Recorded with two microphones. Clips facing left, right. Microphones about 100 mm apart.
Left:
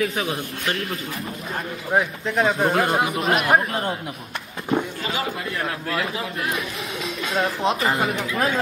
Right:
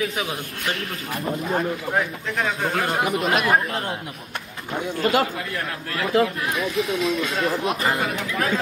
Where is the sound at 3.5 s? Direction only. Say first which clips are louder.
Left 1 dB; 30° left (ahead or behind).